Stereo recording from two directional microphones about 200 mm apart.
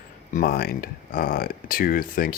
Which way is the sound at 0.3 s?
50° left (ahead or behind).